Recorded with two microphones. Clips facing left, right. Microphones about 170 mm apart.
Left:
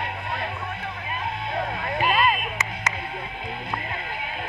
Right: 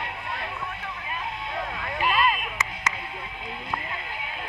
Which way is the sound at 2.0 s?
20° left (ahead or behind).